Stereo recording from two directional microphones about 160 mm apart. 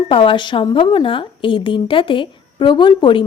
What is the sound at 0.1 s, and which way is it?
A woman's voice, 30° left (ahead or behind).